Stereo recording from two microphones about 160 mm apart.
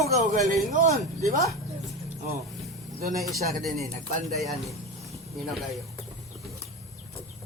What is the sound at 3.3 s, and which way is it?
Speech, centre (ahead or behind).